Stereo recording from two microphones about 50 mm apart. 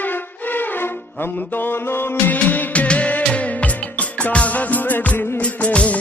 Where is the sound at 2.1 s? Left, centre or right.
Left.